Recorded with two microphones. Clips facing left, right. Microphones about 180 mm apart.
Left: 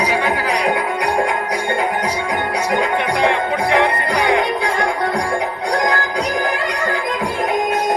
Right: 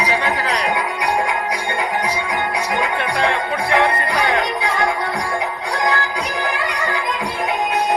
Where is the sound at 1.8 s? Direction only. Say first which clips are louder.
Left 2 dB; 50° left (ahead or behind).